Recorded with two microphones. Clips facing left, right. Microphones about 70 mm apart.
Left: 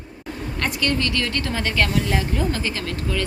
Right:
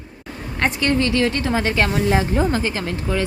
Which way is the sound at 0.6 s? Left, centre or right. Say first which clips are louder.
Right 5 dB; right.